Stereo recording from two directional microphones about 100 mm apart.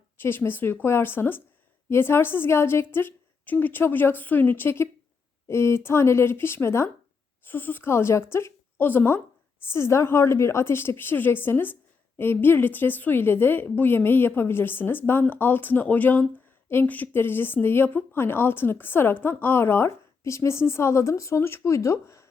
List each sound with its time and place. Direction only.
0.2 s speech: 20° left (ahead or behind)